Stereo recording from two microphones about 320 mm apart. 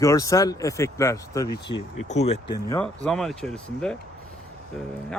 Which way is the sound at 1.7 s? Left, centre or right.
Left.